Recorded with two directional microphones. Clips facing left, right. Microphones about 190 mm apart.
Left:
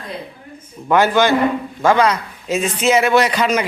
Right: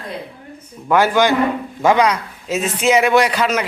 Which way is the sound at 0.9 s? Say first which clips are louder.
Even; 10° right (ahead or behind).